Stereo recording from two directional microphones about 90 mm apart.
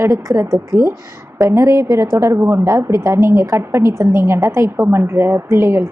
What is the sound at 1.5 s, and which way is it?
A woman's voice, 30° right (ahead or behind).